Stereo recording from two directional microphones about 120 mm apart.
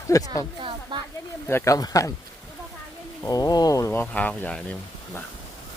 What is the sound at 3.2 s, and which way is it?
Speech, 30° left (ahead or behind).